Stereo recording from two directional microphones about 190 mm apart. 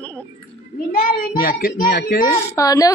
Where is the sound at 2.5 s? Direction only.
20° left (ahead or behind).